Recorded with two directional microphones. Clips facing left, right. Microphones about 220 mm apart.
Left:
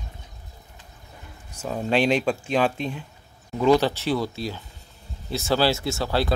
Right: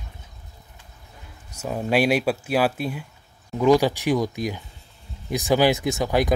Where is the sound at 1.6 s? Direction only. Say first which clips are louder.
Right 1 dB; 10° right (ahead or behind).